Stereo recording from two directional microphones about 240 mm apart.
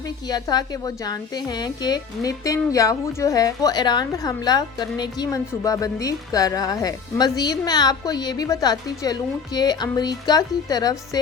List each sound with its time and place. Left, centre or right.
0.3 s a woman's voice: centre